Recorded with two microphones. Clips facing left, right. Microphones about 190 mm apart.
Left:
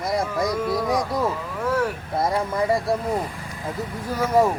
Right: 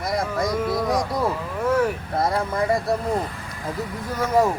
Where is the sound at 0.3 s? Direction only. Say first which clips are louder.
Even; 5° right (ahead or behind).